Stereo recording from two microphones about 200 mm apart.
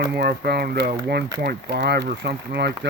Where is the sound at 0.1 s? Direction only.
55° right (ahead or behind).